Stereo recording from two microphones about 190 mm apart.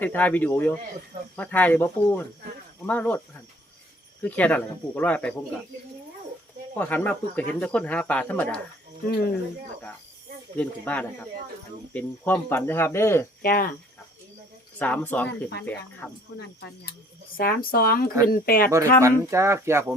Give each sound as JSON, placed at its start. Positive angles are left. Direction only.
{"t": 0.0, "sound": "speech", "side_deg": 10}
{"t": 4.2, "sound": "speech", "side_deg": 5}
{"t": 6.7, "sound": "speech", "side_deg": 10}
{"t": 10.6, "sound": "speech", "side_deg": 5}
{"t": 13.4, "sound": "speech", "side_deg": 50}
{"t": 14.8, "sound": "speech", "side_deg": 10}
{"t": 17.3, "sound": "speech", "side_deg": 50}
{"t": 19.0, "sound": "speech", "side_deg": -15}